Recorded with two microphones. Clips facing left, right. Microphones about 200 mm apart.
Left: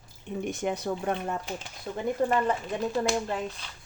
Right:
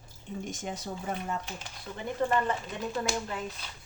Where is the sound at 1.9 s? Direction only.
50° left (ahead or behind).